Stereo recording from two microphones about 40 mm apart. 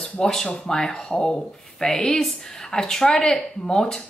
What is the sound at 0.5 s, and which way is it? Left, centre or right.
Speech, centre.